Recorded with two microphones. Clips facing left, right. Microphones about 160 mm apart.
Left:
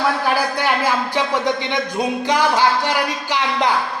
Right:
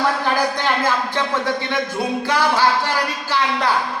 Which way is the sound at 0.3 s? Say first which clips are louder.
Even; 10° left (ahead or behind).